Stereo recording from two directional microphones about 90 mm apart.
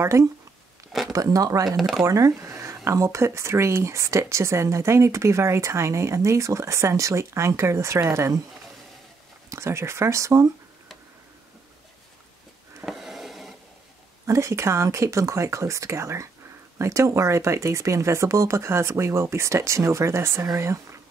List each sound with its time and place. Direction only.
0.0 s speech: 30° right (ahead or behind)
1.8 s speech: 5° right (ahead or behind)
2.0 s speech: 35° right (ahead or behind)
9.5 s speech: 30° right (ahead or behind)
12.8 s a sound: 5° right (ahead or behind)
14.2 s speech: 35° right (ahead or behind)